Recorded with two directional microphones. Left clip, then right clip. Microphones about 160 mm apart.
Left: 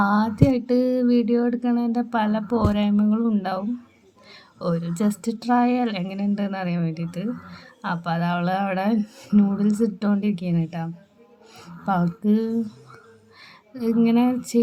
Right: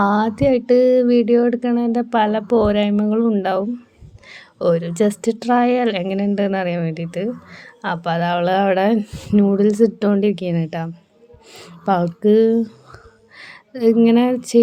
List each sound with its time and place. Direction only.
0.0 s speech: 35° right (ahead or behind)